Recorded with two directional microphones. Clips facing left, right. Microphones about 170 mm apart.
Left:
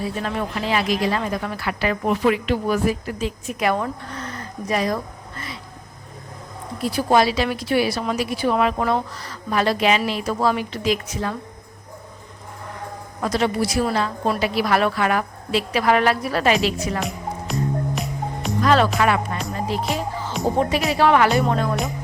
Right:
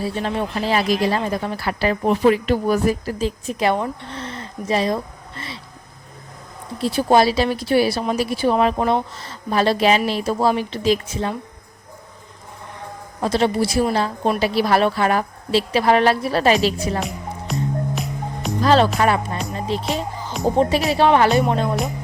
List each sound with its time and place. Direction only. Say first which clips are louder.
0.0 s speech: right 2 dB; 30° right (ahead or behind)
6.7 s a woman's voice: right 2 dB; 30° right (ahead or behind)
13.2 s a woman's voice: right 3 dB; 30° right (ahead or behind)
17.0 s music: even; centre (ahead or behind)
18.6 s speech: right 2 dB; 30° right (ahead or behind)
19.5 s music: right 1 dB; 25° right (ahead or behind)
20.6 s a woman's voice: right 3 dB; 30° right (ahead or behind)